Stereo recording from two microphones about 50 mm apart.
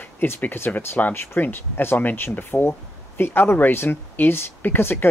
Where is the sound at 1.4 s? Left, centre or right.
Left.